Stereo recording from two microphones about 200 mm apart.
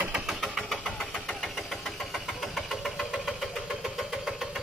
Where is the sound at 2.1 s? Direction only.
Centre (ahead or behind).